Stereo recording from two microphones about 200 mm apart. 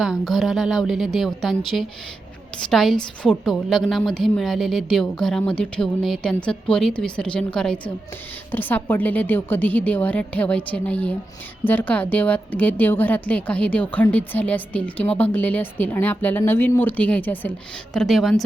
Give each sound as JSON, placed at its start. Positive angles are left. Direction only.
{"t": 0.0, "sound": "a woman's voice", "side_deg": 0}